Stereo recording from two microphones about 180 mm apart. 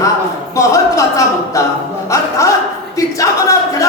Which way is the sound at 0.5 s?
15° left (ahead or behind).